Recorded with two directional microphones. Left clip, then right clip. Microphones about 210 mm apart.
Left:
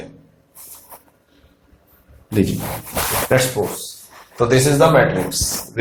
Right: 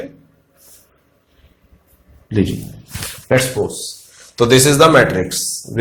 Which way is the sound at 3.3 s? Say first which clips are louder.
Right 4 dB; 40° right (ahead or behind).